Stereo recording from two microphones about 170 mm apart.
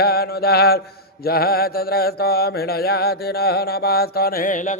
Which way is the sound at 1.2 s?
65° left (ahead or behind).